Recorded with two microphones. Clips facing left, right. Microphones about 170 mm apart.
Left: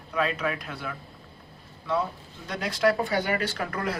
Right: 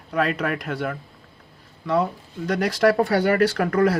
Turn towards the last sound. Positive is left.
turn(degrees=-60)  # may be behind; listen again after turning